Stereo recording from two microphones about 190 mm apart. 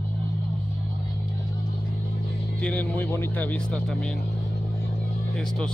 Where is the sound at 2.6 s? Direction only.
5° left (ahead or behind).